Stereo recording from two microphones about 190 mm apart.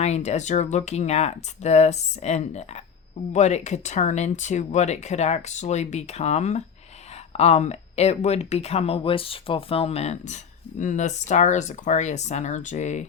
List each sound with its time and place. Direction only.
0.0 s speech: 35° left (ahead or behind)